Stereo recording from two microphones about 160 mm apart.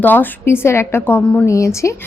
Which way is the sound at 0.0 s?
10° left (ahead or behind).